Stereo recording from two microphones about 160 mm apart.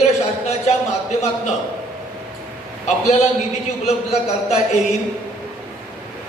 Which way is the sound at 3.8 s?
45° left (ahead or behind).